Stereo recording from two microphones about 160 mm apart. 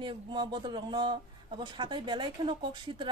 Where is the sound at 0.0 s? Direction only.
30° right (ahead or behind).